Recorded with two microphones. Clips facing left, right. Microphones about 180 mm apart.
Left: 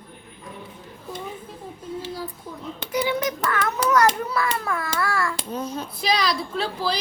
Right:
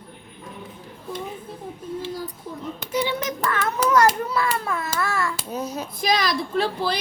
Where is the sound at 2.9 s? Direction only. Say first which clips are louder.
Left 1 dB; 25° right (ahead or behind).